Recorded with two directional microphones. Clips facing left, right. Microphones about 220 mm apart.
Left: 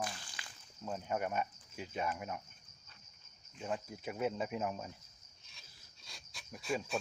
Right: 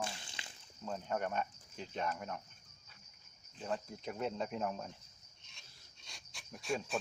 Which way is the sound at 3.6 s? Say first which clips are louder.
Even; 5° left (ahead or behind).